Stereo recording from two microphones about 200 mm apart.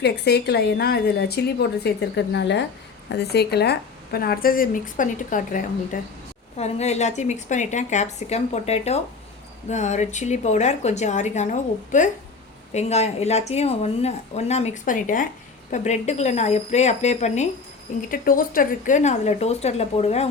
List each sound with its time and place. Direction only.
0.0 s a woman's voice: 55° left (ahead or behind); by 20.3 s 30° left (ahead or behind)